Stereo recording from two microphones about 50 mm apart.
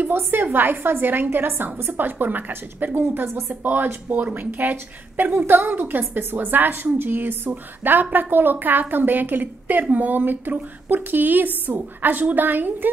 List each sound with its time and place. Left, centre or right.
0.0 s a woman's voice: right